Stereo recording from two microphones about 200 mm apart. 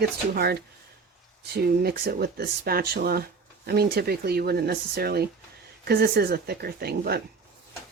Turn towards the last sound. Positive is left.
turn(degrees=-50)  # may be behind; listen again after turning